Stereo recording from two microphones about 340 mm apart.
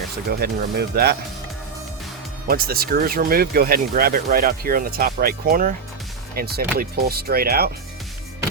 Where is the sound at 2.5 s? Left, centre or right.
Right.